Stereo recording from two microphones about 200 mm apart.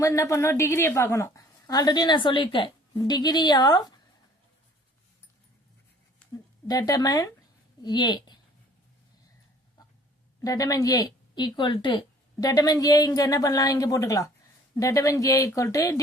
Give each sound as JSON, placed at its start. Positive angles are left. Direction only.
{"t": 0.0, "sound": "a woman's voice", "side_deg": 15}
{"t": 6.7, "sound": "a woman's voice", "side_deg": 20}
{"t": 10.4, "sound": "a woman's voice", "side_deg": 15}